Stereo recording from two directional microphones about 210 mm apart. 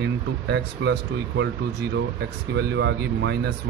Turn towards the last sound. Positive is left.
turn(degrees=-50)  # may be behind; listen again after turning